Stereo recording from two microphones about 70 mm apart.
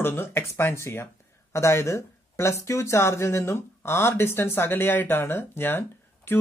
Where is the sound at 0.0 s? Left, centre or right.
Left.